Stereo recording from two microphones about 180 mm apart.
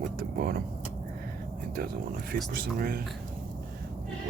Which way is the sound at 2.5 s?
55° right (ahead or behind).